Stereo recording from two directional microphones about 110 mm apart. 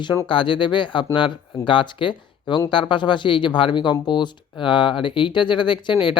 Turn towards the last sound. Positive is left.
turn(degrees=50)  # may be behind; listen again after turning